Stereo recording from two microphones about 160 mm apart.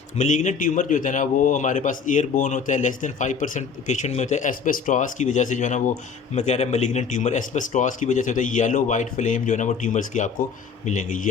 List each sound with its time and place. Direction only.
0.2 s a man's voice: 50° left (ahead or behind)